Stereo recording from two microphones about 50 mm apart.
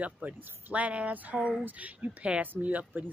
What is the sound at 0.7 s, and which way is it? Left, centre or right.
A woman's voice, right.